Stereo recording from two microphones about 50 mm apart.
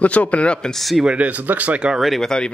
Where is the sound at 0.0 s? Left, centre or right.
Left.